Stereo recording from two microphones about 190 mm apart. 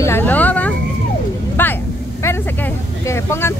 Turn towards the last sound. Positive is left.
turn(degrees=15)  # may be behind; listen again after turning